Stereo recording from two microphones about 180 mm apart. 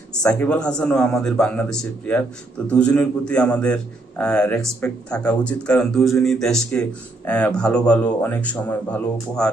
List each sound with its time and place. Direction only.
0.1 s a man's voice: 5° left (ahead or behind)